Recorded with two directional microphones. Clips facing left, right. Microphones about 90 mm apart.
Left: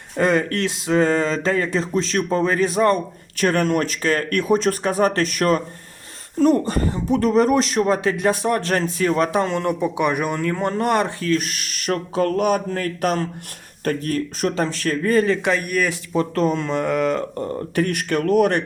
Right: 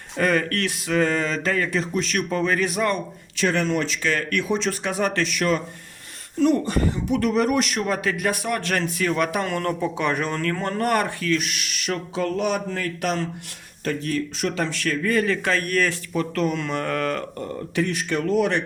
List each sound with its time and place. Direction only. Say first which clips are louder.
0.2 s a sound: left 3 dB; 25° left (ahead or behind)
3.3 s speech: left 3 dB; 50° left (ahead or behind); by 11.3 s 25° left (ahead or behind)
11.3 s speech: left 2 dB; 40° left (ahead or behind)
13.8 s a sound: left 3 dB; 45° left (ahead or behind)
15.4 s speech: left 2 dB; 15° left (ahead or behind)
16.1 s speech: left 6 dB; 35° left (ahead or behind); by 17.2 s 20° left (ahead or behind)
17.7 s speech: left 3 dB; 55° left (ahead or behind)